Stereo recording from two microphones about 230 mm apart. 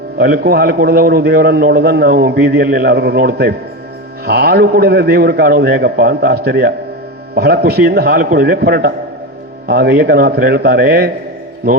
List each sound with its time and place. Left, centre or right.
0.2 s a man's voice: right